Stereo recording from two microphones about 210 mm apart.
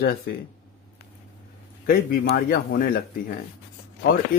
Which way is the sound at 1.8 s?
45° left (ahead or behind).